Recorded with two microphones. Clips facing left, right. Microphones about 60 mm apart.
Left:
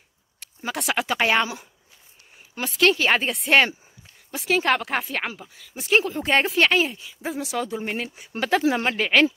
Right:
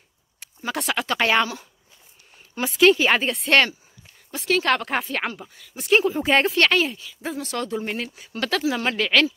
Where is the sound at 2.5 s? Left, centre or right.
Centre.